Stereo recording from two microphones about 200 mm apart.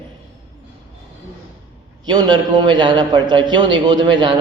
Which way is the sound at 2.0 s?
20° right (ahead or behind).